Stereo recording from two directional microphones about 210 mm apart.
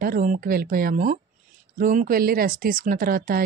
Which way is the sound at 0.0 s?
40° right (ahead or behind).